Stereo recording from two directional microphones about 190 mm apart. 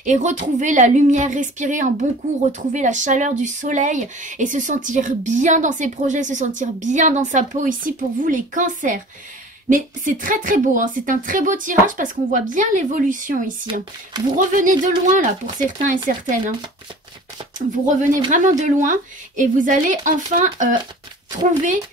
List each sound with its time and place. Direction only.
0.0 s speech: 40° right (ahead or behind)
17.6 s speech: 45° right (ahead or behind)